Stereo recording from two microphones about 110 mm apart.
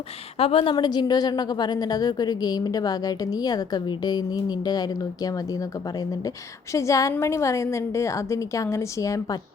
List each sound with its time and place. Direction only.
0.3 s a woman's voice: 60° left (ahead or behind); by 9.4 s 30° left (ahead or behind)